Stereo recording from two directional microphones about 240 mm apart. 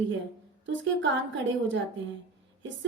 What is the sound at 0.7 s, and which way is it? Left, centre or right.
Speech, right.